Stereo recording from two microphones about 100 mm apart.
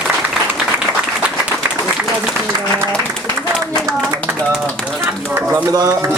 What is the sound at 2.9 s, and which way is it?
Applause, 10° left (ahead or behind).